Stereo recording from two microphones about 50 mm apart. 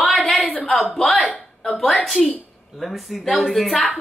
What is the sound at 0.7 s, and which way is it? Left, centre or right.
Speech, centre.